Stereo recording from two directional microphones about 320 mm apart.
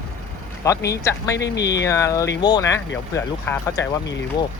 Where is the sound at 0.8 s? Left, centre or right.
Left.